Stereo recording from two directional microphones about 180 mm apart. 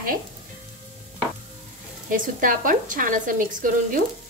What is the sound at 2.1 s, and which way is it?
Speech, 50° right (ahead or behind).